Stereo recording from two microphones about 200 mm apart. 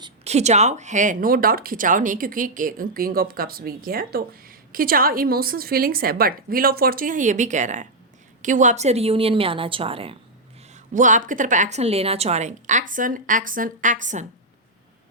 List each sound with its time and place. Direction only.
0.3 s a woman's voice: 35° right (ahead or behind)
10.9 s a woman's voice: 40° right (ahead or behind)